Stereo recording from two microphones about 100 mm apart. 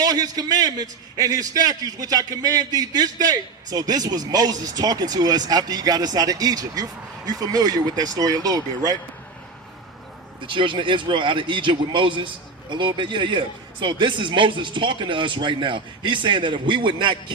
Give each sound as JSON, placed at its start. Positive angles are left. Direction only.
{"t": 0.0, "sound": "a man's voice", "side_deg": -40}
{"t": 10.4, "sound": "speech", "side_deg": -55}